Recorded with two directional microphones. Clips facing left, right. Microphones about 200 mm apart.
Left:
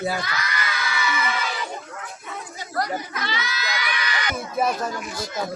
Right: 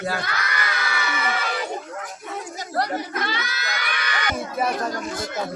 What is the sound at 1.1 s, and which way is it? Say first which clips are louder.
Crowd: right 1 dB; 55° right (ahead or behind).